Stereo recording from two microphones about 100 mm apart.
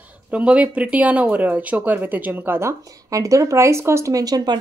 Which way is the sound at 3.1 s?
35° right (ahead or behind).